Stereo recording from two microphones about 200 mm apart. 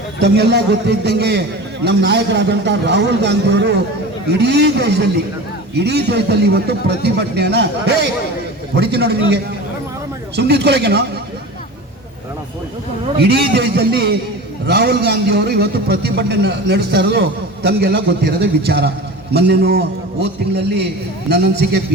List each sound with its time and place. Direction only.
0.2 s a man's voice: 55° right (ahead or behind)
10.3 s a man's voice: 55° right (ahead or behind)
13.1 s a man's voice: 55° right (ahead or behind)